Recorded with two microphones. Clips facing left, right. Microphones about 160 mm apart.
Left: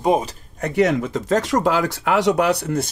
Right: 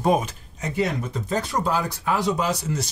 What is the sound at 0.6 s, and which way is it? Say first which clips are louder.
Speech: left 7 dB; 80° left.